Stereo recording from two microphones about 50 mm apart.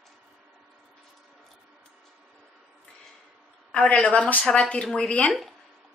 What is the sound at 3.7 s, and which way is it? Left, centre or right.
Speech, left.